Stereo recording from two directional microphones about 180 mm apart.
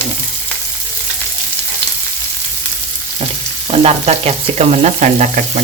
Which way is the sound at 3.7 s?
35° right (ahead or behind).